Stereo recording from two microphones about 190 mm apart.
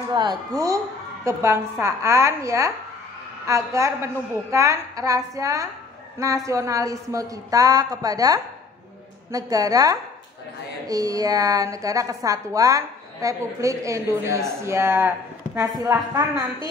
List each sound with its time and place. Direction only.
0.1 s a woman's voice: 25° right (ahead or behind)